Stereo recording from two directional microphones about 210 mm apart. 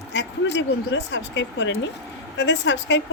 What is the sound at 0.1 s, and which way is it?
Speech, 55° left (ahead or behind).